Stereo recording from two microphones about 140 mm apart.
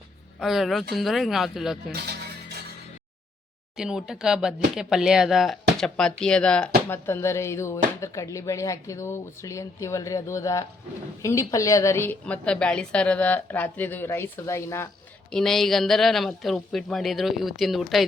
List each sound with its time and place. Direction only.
0.3 s speech: centre (ahead or behind)
3.8 s a woman's voice: 5° right (ahead or behind); by 14.8 s 20° left (ahead or behind)
15.3 s speech: 5° left (ahead or behind)